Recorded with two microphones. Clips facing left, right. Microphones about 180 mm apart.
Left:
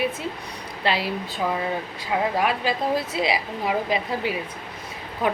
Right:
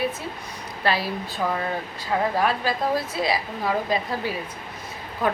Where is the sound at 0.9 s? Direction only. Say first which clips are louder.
Even; 20° left (ahead or behind).